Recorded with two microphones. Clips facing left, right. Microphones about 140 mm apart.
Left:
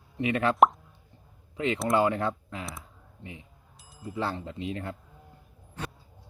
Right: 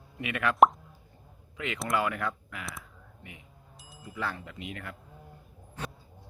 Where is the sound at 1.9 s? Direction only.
30° left (ahead or behind).